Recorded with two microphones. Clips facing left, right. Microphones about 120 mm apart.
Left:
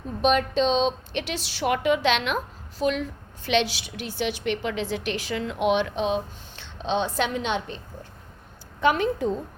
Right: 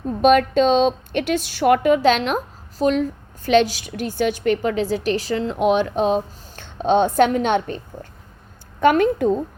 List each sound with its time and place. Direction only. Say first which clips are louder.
0.2 s a woman's voice: right 7 dB; 50° right (ahead or behind)
8.8 s a woman's voice: right 6 dB; 55° right (ahead or behind)